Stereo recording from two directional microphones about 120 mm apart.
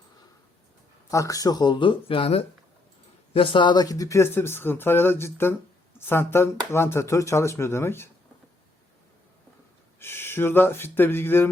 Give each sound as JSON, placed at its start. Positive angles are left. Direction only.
{"t": 1.1, "sound": "speech", "side_deg": 25}
{"t": 10.0, "sound": "speech", "side_deg": 20}